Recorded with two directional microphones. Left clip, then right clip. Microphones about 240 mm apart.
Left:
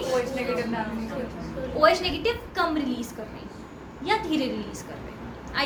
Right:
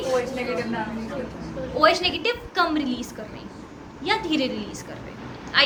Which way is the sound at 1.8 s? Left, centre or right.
Centre.